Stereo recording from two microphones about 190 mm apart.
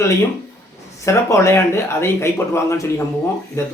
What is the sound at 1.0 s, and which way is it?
Speech, 15° left (ahead or behind).